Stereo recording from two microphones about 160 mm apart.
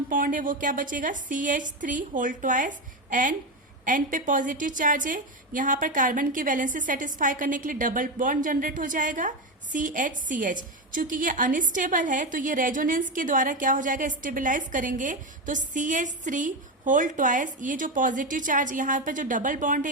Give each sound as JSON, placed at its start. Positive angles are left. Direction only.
{"t": 0.1, "sound": "a woman's voice", "side_deg": -55}